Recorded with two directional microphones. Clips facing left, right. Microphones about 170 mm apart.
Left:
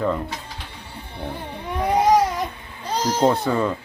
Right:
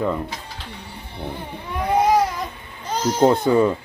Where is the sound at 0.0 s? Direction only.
10° right (ahead or behind).